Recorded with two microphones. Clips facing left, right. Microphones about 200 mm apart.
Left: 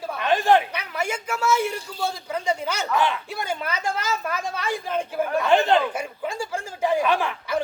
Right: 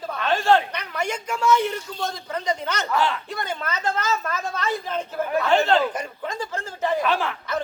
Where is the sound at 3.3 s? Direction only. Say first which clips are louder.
Left 1 dB; 10° left (ahead or behind).